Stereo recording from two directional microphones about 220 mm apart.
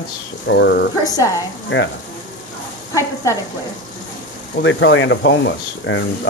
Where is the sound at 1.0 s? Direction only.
15° left (ahead or behind).